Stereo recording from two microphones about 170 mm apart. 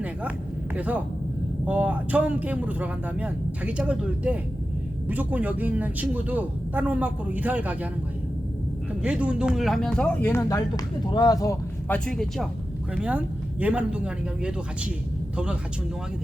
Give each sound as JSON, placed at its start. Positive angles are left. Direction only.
{"t": 0.8, "sound": "a man's voice", "side_deg": -10}
{"t": 9.0, "sound": "speech", "side_deg": -5}
{"t": 11.0, "sound": "speech", "side_deg": 25}
{"t": 11.9, "sound": "speech", "side_deg": 5}
{"t": 13.0, "sound": "a man's voice", "side_deg": -10}